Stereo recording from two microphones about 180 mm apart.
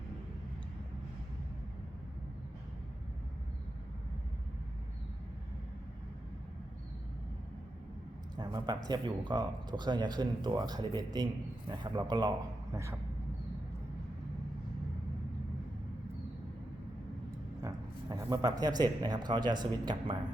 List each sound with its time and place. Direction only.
8.4 s speech: 25° right (ahead or behind)
17.6 s a sound: 20° right (ahead or behind)
18.6 s speech: 20° right (ahead or behind)